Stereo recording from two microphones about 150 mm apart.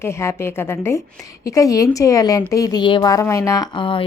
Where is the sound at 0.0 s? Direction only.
20° left (ahead or behind).